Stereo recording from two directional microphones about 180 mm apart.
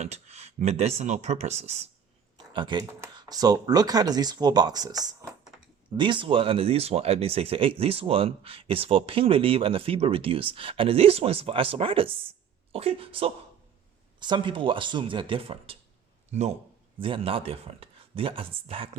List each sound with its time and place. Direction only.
0.0 s speech: 35° right (ahead or behind)
2.5 s speech: 25° right (ahead or behind)